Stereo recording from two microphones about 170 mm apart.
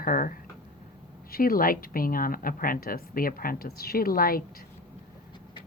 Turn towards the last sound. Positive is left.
turn(degrees=60)  # may be behind; listen again after turning